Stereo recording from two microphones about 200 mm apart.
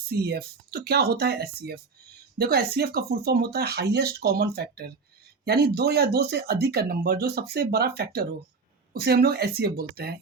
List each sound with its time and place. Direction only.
0.1 s speech: 50° right (ahead or behind)